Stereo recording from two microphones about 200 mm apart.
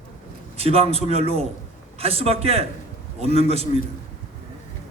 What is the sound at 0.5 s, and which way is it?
A man's voice, 30° right (ahead or behind).